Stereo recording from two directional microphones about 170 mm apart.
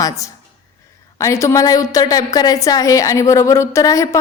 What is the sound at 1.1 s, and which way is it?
A woman's voice, 15° left (ahead or behind).